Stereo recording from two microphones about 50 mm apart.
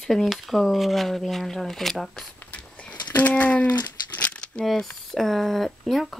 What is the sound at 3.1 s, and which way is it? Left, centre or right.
Speech, left.